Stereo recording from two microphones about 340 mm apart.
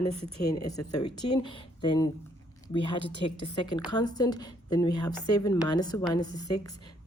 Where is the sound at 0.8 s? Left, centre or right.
Left.